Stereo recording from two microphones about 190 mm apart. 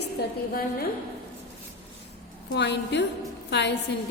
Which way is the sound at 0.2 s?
60° left (ahead or behind).